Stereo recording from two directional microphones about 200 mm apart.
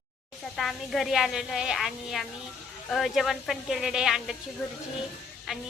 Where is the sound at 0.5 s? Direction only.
Centre (ahead or behind).